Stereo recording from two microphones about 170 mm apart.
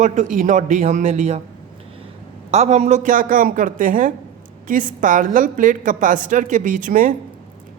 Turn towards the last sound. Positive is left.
turn(degrees=-50)  # may be behind; listen again after turning